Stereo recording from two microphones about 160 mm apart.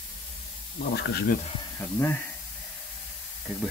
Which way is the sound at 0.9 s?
80° left.